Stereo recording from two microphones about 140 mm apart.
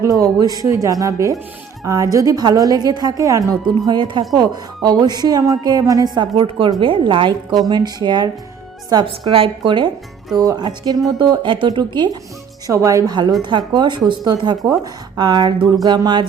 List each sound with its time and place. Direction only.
0.0 s speech: 25° right (ahead or behind)
6.3 s speech: 35° right (ahead or behind)